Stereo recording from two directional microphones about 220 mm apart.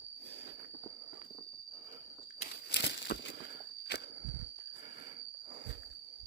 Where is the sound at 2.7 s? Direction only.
50° left (ahead or behind).